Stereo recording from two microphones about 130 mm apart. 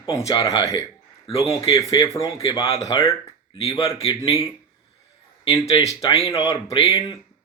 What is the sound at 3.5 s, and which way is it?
Speech, 45° left (ahead or behind).